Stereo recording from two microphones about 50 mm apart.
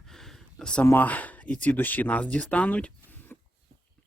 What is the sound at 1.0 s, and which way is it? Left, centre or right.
Speech, left.